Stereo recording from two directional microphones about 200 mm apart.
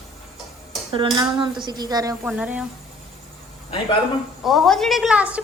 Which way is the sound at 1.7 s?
20° right (ahead or behind).